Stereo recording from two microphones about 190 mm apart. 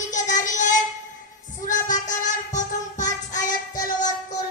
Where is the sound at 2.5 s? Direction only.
40° left (ahead or behind).